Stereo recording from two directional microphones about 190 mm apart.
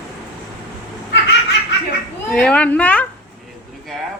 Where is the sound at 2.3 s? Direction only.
5° left (ahead or behind).